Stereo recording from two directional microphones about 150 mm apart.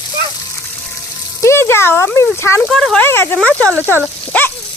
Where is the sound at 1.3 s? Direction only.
15° left (ahead or behind).